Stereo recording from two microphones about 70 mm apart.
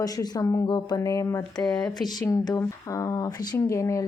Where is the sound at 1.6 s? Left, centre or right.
Centre.